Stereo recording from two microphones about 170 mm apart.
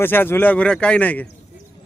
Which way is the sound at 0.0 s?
10° left (ahead or behind).